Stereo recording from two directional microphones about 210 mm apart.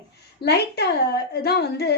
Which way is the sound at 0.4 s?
50° left (ahead or behind).